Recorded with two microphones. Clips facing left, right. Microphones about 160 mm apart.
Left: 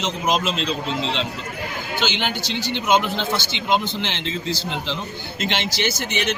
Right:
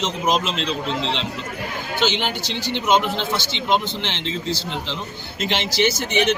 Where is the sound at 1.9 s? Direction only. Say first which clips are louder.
Right 2 dB; centre (ahead or behind).